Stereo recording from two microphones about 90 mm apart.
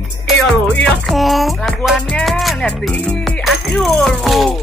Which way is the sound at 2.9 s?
10° left (ahead or behind).